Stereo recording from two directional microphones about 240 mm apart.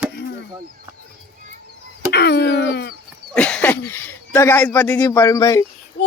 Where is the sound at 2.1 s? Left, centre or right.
Left.